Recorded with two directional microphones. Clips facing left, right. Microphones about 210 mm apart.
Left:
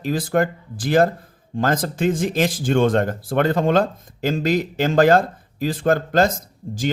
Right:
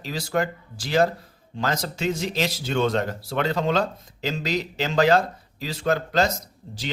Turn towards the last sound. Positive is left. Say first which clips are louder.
# left 10 dB
turn(degrees=50)  # may be behind; listen again after turning